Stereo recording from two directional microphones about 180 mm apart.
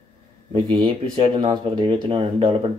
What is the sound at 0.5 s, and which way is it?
Speech, 30° right (ahead or behind).